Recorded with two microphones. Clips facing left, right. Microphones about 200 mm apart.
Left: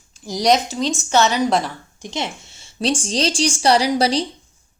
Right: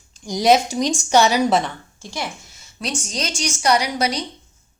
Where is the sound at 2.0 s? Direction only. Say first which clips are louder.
Left 3 dB; 20° left (ahead or behind).